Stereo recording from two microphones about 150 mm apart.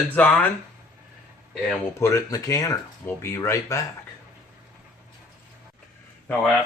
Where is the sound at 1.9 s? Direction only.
20° left (ahead or behind).